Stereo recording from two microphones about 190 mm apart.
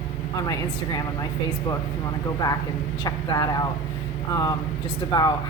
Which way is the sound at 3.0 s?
20° left (ahead or behind).